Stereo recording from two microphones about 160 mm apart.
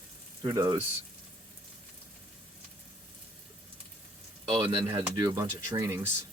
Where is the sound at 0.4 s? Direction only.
20° right (ahead or behind).